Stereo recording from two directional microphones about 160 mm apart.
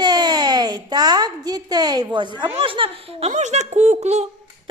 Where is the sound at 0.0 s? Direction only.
25° right (ahead or behind).